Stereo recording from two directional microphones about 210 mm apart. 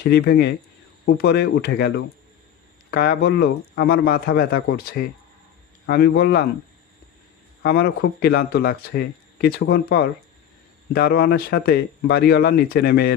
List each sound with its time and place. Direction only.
0.1 s speech: 50° left (ahead or behind)
7.6 s speech: 45° left (ahead or behind)